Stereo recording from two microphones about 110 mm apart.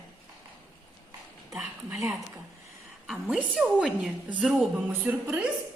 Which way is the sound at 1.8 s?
20° right (ahead or behind).